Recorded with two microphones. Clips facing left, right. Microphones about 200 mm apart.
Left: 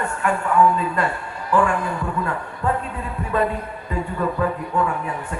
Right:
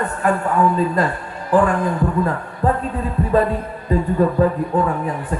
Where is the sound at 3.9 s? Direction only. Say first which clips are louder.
Right 7 dB; 35° right (ahead or behind).